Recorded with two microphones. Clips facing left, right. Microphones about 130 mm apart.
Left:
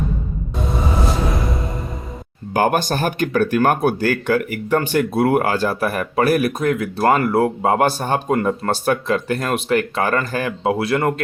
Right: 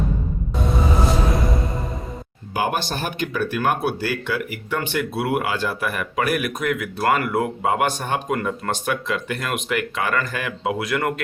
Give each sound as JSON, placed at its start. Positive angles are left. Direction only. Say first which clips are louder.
{"t": 2.5, "sound": "speech", "louder": "left 6 dB", "side_deg": 45}